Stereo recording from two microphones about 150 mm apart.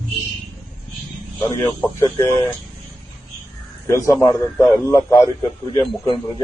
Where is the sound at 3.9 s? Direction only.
20° left (ahead or behind).